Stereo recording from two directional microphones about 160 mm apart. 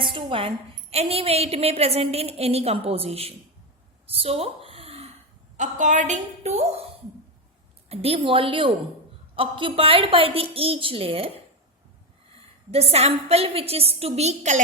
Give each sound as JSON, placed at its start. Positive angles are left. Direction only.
{"t": 0.1, "sound": "a woman's voice", "side_deg": -35}
{"t": 4.0, "sound": "a sound", "side_deg": -35}
{"t": 5.5, "sound": "a woman's voice", "side_deg": -50}
{"t": 7.9, "sound": "a woman's voice", "side_deg": -40}
{"t": 12.7, "sound": "a woman's voice", "side_deg": -40}